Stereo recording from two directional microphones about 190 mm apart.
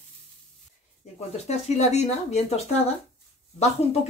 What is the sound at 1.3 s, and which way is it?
Speech, 35° left (ahead or behind).